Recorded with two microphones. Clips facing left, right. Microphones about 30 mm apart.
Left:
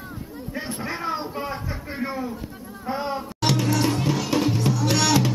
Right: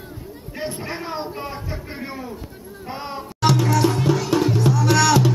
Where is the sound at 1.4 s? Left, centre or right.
Centre.